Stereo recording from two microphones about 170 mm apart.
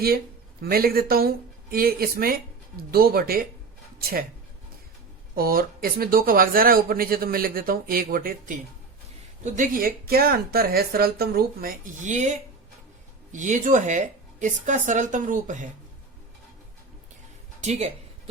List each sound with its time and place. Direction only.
0.6 s speech: 60° right (ahead or behind)
5.3 s speech: 60° right (ahead or behind)
17.6 s speech: 40° right (ahead or behind)